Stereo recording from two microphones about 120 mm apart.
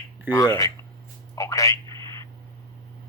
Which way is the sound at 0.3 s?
30° left (ahead or behind).